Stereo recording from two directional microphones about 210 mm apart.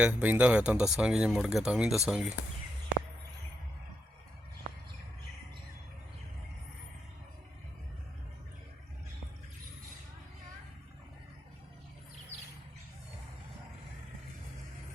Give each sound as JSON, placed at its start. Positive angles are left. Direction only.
{"t": 0.0, "sound": "speech", "side_deg": -5}